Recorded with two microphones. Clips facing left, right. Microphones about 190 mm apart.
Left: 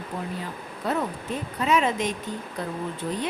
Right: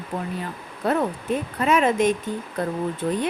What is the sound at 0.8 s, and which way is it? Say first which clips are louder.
Speech: right 5 dB; 60° right (ahead or behind).